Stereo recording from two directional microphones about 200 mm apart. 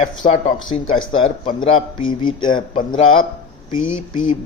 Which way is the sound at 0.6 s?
25° left (ahead or behind).